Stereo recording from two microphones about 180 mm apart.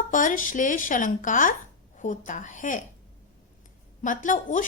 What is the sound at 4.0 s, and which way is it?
Speech, 45° left (ahead or behind).